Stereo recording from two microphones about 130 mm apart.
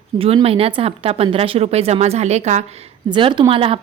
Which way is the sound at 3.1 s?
40° right (ahead or behind).